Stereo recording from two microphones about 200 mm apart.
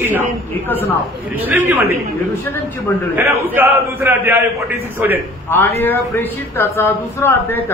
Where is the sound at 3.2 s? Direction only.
15° right (ahead or behind).